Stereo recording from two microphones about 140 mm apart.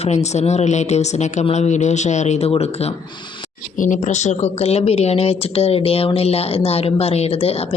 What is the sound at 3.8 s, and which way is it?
Speech, 60° left (ahead or behind).